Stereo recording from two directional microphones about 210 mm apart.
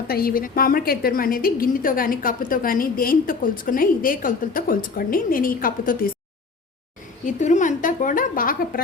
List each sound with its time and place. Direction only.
0.1 s a woman's voice: 45° left (ahead or behind)
7.3 s a woman's voice: 35° left (ahead or behind)